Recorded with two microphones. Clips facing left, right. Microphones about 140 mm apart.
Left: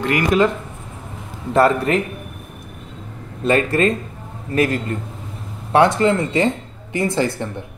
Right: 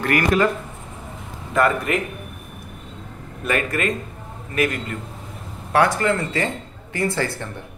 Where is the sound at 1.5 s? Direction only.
35° left (ahead or behind).